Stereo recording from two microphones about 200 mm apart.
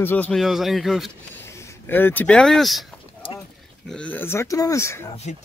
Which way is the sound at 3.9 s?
5° left (ahead or behind).